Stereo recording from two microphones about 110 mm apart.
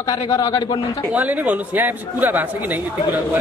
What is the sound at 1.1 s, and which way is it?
A man's voice, 15° right (ahead or behind).